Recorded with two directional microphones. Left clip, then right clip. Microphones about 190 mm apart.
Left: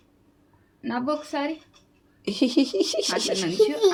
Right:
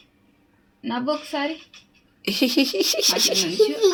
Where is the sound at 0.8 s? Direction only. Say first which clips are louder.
Right 2 dB; 15° right (ahead or behind).